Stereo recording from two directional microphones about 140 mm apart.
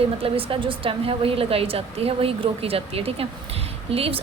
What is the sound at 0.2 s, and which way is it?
A woman's voice, 40° right (ahead or behind).